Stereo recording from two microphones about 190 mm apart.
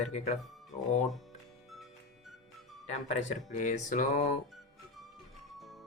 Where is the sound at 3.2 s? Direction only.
40° left (ahead or behind).